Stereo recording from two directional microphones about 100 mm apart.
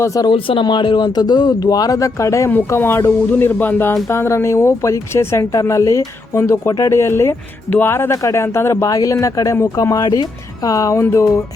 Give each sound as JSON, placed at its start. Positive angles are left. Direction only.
{"t": 0.0, "sound": "speech", "side_deg": 30}
{"t": 0.3, "sound": "speech", "side_deg": 60}